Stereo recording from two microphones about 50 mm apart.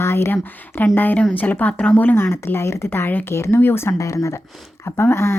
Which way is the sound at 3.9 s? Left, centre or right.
Left.